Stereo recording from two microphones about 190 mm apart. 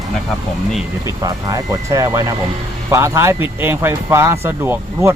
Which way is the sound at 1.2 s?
20° right (ahead or behind).